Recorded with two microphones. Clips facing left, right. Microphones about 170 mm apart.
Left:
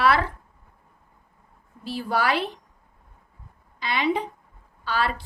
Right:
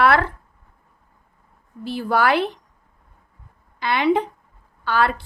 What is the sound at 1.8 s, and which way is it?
Speech, 60° right (ahead or behind).